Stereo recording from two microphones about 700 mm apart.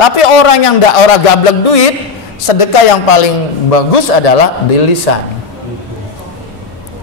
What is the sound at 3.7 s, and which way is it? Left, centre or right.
A man's voice, left.